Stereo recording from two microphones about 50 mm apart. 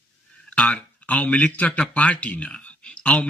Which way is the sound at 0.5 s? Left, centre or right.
Left.